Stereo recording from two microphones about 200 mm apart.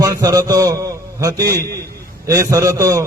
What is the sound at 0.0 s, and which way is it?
A man's voice, 15° right (ahead or behind).